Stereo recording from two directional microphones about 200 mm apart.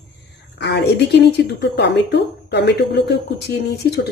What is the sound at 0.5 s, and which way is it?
A woman's voice, 60° left (ahead or behind).